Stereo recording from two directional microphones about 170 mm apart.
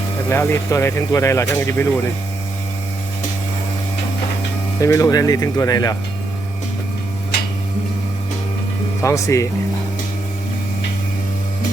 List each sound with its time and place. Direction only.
0.3 s speech: 15° left (ahead or behind)
4.8 s speech: 20° left (ahead or behind)
9.0 s speech: 20° left (ahead or behind)